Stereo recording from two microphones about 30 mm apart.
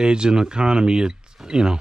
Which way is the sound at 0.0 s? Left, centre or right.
Right.